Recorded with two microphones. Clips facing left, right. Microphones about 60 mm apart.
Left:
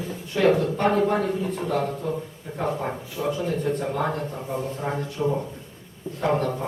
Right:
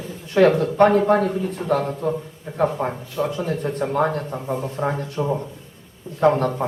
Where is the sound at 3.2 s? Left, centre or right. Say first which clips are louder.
Right 3 dB; right.